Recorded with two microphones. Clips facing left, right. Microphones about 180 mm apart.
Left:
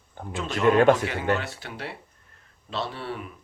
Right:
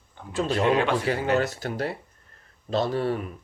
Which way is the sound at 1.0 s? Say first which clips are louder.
Right 3 dB; 40° right (ahead or behind).